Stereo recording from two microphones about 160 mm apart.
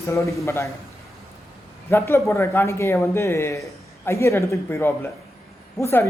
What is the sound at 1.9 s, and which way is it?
Speech, 15° left (ahead or behind).